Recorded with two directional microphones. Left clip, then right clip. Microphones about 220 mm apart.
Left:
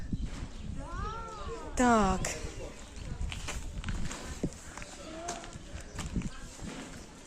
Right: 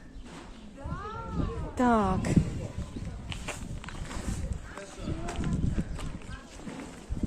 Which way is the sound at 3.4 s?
Centre (ahead or behind).